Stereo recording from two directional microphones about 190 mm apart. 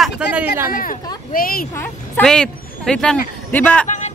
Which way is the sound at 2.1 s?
5° left (ahead or behind).